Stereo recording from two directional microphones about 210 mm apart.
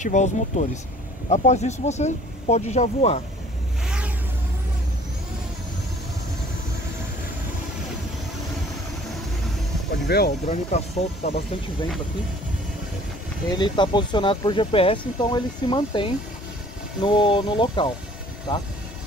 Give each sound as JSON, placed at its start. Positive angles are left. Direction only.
{"t": 0.0, "sound": "speech", "side_deg": 35}
{"t": 3.8, "sound": "vehicle", "side_deg": -5}
{"t": 9.8, "sound": "speech", "side_deg": 50}
{"t": 10.4, "sound": "speech", "side_deg": 30}
{"t": 13.6, "sound": "speech", "side_deg": 20}